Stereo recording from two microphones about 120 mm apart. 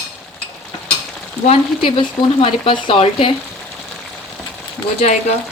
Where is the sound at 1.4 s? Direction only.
45° left (ahead or behind).